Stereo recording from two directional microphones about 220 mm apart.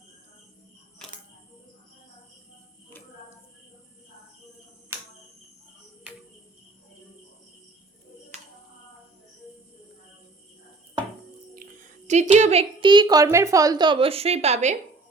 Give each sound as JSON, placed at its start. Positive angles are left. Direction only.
{"t": 11.5, "sound": "a woman's voice", "side_deg": -35}